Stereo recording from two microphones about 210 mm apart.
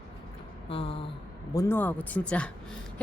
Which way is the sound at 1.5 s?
10° left (ahead or behind).